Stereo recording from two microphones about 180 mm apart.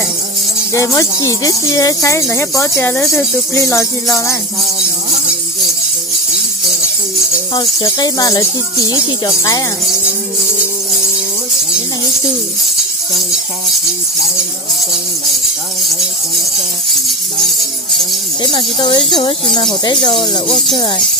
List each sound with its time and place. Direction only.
0.7 s speech: 15° left (ahead or behind)
7.5 s speech: 20° left (ahead or behind)
15.8 s a sound: centre (ahead or behind)
18.4 s speech: 25° left (ahead or behind)